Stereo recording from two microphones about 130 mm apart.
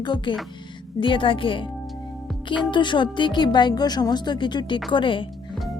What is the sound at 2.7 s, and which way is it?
Speech, 40° left (ahead or behind).